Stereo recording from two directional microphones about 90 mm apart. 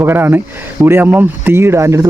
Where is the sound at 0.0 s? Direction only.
25° right (ahead or behind).